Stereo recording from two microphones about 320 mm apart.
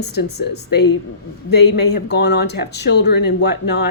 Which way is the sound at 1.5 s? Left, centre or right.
Left.